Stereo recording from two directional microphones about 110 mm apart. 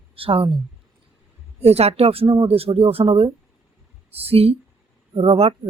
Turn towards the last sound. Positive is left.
turn(degrees=-65)  # may be behind; listen again after turning